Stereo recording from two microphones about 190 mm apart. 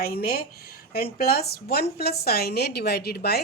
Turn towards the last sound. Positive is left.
turn(degrees=55)  # may be behind; listen again after turning